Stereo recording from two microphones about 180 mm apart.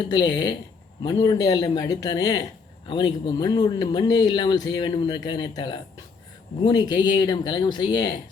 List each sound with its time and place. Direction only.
0.1 s speech: 25° left (ahead or behind)